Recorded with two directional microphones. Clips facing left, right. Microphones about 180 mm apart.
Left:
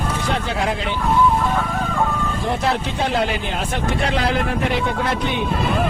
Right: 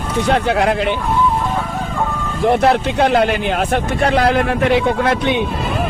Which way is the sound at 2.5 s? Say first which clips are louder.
Right 9 dB; 65° right (ahead or behind).